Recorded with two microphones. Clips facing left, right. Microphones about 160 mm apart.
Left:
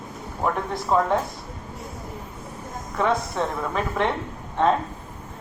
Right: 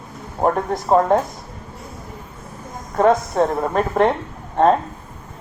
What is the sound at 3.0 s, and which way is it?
Speech, 45° right (ahead or behind).